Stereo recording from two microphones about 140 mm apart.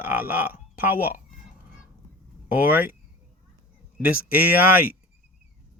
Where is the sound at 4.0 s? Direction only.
10° right (ahead or behind).